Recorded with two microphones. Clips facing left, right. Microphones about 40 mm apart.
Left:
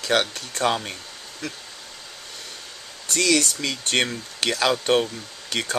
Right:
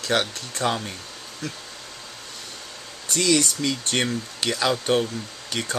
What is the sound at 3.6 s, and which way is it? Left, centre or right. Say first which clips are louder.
Speech: left 1 dB; centre.